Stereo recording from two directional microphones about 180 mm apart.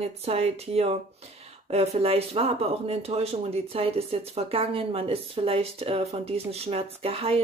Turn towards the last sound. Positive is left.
turn(degrees=-30)  # may be behind; listen again after turning